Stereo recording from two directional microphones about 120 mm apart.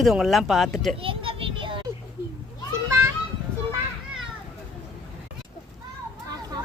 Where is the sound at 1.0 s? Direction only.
50° right (ahead or behind).